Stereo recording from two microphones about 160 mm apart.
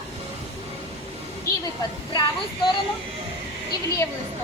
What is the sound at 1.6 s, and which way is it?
Speech, 25° left (ahead or behind).